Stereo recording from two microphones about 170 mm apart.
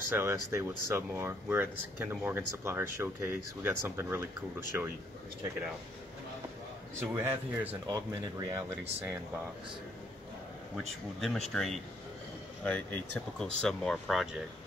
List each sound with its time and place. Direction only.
0.1 s speech: 15° right (ahead or behind)
7.0 s speech: 10° right (ahead or behind)
11.1 s speech: centre (ahead or behind)